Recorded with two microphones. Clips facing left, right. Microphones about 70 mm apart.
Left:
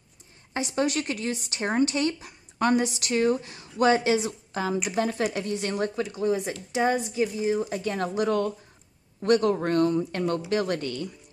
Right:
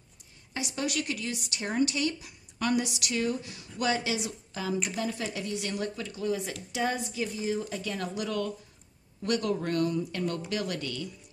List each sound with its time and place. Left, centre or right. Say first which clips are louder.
0.5 s speech: left 7 dB; left
6.0 s a woman's voice: left 5 dB; left
7.7 s speech: left 6 dB; left